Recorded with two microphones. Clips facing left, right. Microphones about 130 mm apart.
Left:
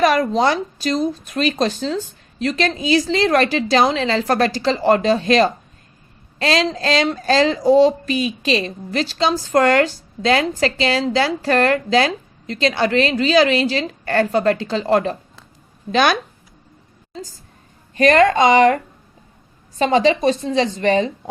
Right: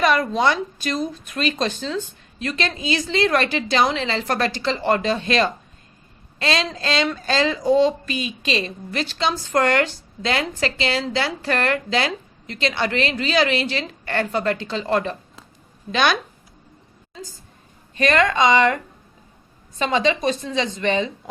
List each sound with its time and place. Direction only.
0.0 s a sound: 40° left (ahead or behind)
0.3 s a woman's voice: 35° left (ahead or behind)
17.9 s a woman's voice: 40° left (ahead or behind)
19.8 s a woman's voice: 35° left (ahead or behind)